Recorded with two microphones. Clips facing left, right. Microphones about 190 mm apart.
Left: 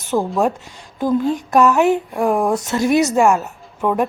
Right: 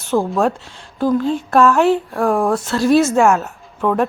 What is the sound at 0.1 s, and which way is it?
Speech, 15° left (ahead or behind).